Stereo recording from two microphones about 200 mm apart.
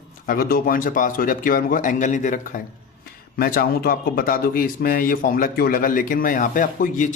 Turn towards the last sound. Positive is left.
turn(degrees=40)  # may be behind; listen again after turning